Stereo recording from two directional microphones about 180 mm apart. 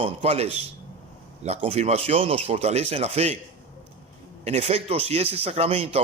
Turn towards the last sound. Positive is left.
turn(degrees=-30)  # may be behind; listen again after turning